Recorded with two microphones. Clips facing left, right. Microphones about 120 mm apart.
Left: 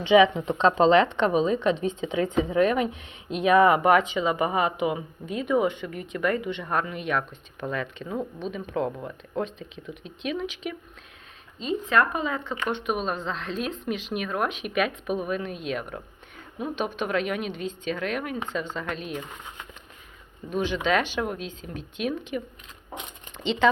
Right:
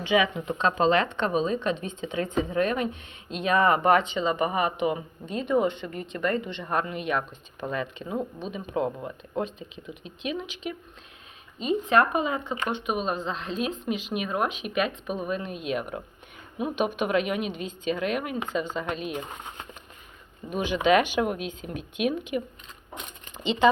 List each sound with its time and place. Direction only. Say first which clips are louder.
0.0 s a woman's voice: left 6 dB; 25° left (ahead or behind); by 10.8 s centre (ahead or behind)
11.6 s a woman's voice: right 1 dB; 20° right (ahead or behind)
12.6 s a woman's voice: left 1 dB; centre (ahead or behind)
20.5 s a woman's voice: right 3 dB; 10° right (ahead or behind)